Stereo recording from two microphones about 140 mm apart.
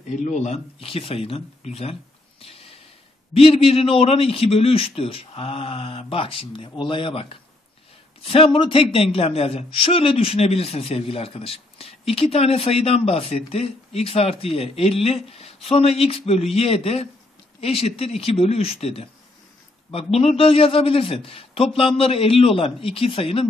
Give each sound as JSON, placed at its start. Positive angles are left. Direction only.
{"t": 0.1, "sound": "a man's voice", "side_deg": 55}
{"t": 2.4, "sound": "a sound", "side_deg": 45}
{"t": 3.3, "sound": "a man's voice", "side_deg": 45}